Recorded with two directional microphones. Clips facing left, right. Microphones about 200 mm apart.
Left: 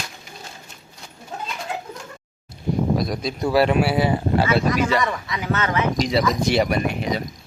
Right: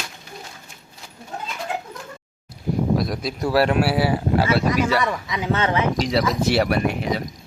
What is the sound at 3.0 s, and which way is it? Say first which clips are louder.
Speech: left 1 dB; centre (ahead or behind).